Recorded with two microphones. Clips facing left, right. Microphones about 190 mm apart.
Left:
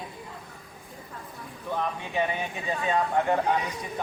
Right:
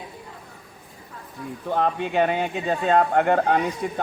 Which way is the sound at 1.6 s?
75° right (ahead or behind).